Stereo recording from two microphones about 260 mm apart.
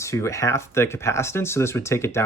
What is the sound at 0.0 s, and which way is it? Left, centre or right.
Speech, centre.